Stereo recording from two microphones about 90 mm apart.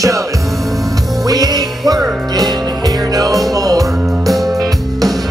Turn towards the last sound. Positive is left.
turn(degrees=-40)  # may be behind; listen again after turning